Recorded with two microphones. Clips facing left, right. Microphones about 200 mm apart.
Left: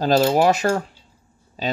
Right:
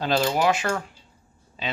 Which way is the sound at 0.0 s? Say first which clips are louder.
Left 6 dB; 40° left (ahead or behind).